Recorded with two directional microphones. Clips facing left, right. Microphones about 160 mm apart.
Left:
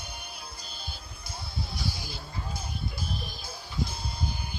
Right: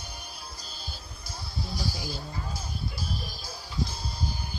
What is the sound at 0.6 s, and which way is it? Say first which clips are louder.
Music: even; 55° left (ahead or behind).